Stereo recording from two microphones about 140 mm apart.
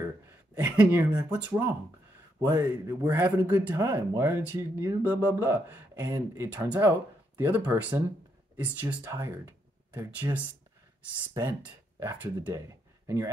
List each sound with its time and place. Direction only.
0.6 s a man's voice: 15° right (ahead or behind)
11.6 s speech: 15° right (ahead or behind)